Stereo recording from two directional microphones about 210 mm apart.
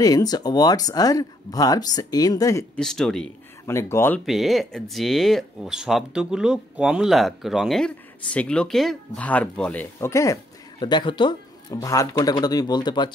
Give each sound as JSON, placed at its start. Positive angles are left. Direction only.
{"t": 0.0, "sound": "speech", "side_deg": 15}
{"t": 2.8, "sound": "speech", "side_deg": 0}
{"t": 4.3, "sound": "speech", "side_deg": 0}